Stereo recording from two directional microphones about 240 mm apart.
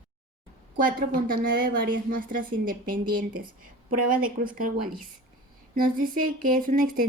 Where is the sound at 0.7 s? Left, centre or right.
Right.